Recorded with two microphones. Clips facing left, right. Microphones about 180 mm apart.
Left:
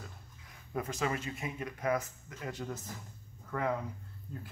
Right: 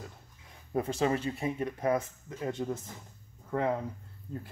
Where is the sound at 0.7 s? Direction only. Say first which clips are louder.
Right 6 dB; 30° right (ahead or behind).